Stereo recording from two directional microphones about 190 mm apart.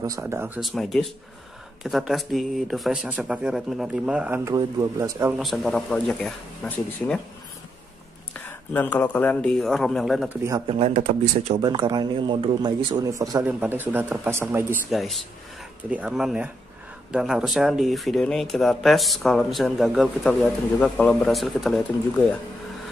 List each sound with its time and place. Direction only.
0.0 s speech: 15° right (ahead or behind)
0.6 s speech: centre (ahead or behind)
4.5 s speech: 15° right (ahead or behind)
5.4 s speech: centre (ahead or behind)
8.3 s speech: 10° left (ahead or behind); by 10.6 s 10° right (ahead or behind)
10.7 s speech: 30° right (ahead or behind)
11.6 s a man's voice: 25° right (ahead or behind)
14.9 s speech: centre (ahead or behind)